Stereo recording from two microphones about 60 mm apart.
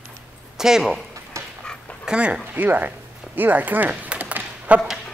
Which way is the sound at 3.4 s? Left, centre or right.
Right.